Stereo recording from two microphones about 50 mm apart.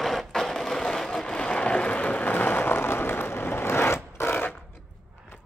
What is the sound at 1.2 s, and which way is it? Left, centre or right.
Vehicle, centre.